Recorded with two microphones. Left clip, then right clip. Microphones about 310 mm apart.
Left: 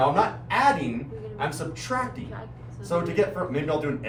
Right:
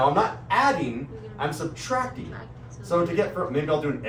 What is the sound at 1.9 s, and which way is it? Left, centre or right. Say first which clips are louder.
Speech: right 2 dB; centre.